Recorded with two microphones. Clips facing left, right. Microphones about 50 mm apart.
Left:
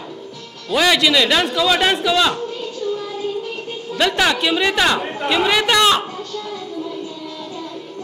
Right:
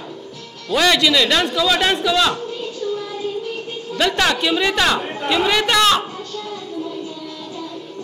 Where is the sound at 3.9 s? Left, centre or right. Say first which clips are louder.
Left 1 dB; centre.